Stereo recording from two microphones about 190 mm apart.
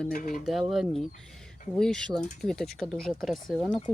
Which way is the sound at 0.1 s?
45° left (ahead or behind).